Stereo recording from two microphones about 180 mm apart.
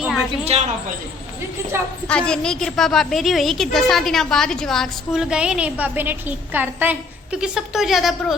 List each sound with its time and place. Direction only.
0.4 s a woman's voice: 40° right (ahead or behind)
2.0 s a woman's voice: 5° left (ahead or behind)